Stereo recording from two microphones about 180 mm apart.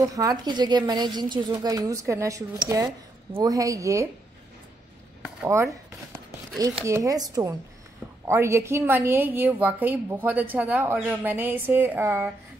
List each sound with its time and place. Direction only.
0.0 s a woman's voice: 20° right (ahead or behind)
5.4 s a woman's voice: 15° right (ahead or behind)
6.8 s a woman's voice: 15° right (ahead or behind)